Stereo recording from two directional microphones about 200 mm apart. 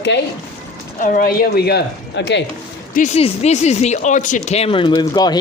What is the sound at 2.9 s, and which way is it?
Speech, 35° left (ahead or behind).